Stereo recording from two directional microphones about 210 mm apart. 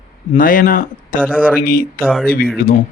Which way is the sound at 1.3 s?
5° right (ahead or behind).